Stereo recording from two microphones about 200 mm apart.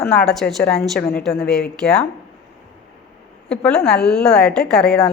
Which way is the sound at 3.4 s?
5° left (ahead or behind).